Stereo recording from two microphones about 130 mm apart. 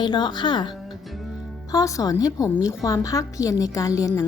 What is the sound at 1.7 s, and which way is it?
A woman's voice, 25° left (ahead or behind).